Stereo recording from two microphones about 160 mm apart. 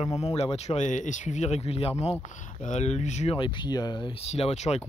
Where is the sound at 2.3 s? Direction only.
50° left (ahead or behind).